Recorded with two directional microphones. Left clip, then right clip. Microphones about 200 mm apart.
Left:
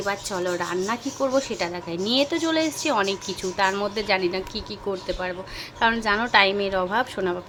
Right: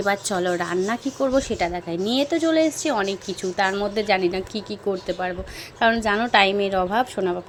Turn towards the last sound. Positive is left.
turn(degrees=-10)  # may be behind; listen again after turning